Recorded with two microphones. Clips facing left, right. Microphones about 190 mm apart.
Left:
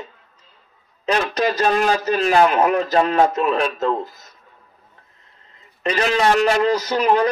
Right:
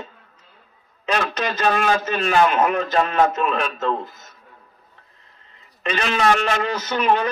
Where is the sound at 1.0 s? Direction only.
35° left (ahead or behind).